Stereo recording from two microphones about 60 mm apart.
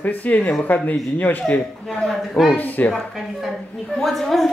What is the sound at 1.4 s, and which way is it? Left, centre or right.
Speech, centre.